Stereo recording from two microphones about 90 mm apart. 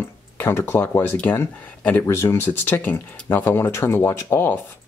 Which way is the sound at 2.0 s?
30° left (ahead or behind).